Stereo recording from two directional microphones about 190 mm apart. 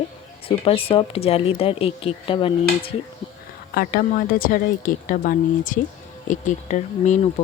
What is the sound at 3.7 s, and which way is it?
A woman's voice, 55° left (ahead or behind).